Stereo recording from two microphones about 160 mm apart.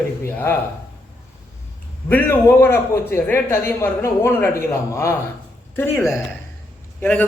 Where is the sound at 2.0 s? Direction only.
15° left (ahead or behind).